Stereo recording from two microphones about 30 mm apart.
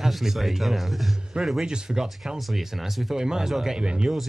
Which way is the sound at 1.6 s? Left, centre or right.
Right.